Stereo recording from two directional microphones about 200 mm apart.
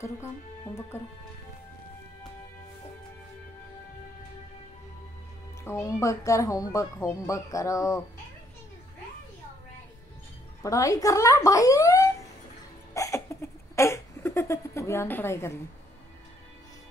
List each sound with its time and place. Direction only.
0.9 s a woman's voice: 10° left (ahead or behind)
5.6 s a woman's voice: 15° left (ahead or behind)
10.6 s a woman's voice: 15° left (ahead or behind)
12.9 s a sound: 15° left (ahead or behind)